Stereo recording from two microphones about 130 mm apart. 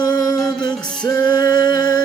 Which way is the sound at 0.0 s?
30° left (ahead or behind).